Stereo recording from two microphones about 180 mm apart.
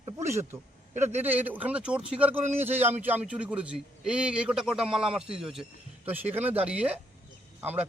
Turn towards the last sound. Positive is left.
turn(degrees=-10)  # may be behind; listen again after turning